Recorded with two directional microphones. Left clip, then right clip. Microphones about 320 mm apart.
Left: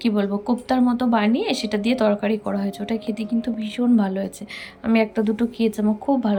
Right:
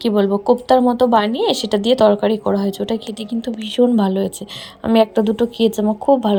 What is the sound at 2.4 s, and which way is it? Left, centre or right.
Speech, right.